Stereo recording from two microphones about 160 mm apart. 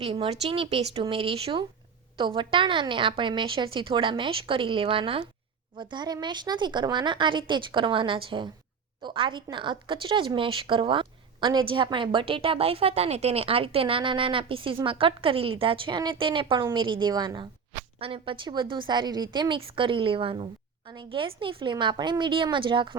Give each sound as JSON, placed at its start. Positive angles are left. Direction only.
{"t": 0.0, "sound": "a woman's voice", "side_deg": -35}